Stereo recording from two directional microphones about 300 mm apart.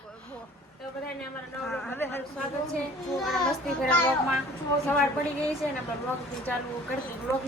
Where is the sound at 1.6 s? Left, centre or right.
Centre.